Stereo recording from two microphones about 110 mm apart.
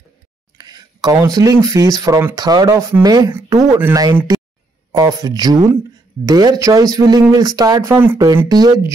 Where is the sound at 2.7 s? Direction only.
25° right (ahead or behind).